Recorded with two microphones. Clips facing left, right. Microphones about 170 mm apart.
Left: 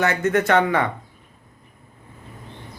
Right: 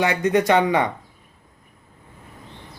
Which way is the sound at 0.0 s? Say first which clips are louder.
Right 1 dB; 15° right (ahead or behind).